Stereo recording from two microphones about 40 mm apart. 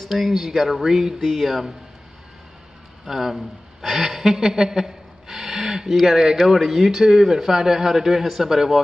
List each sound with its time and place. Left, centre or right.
0.1 s speech: centre
3.1 s a man's voice: centre